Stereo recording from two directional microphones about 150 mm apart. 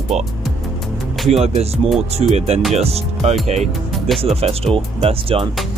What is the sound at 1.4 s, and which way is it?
Speech, 45° right (ahead or behind).